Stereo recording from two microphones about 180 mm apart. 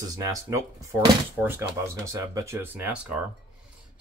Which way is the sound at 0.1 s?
20° right (ahead or behind).